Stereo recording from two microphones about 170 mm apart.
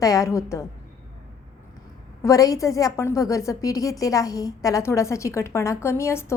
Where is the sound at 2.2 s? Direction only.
20° left (ahead or behind).